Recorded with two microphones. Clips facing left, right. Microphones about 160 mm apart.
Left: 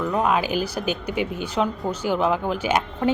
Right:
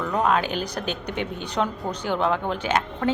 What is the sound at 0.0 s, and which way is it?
A woman's voice, 5° left (ahead or behind).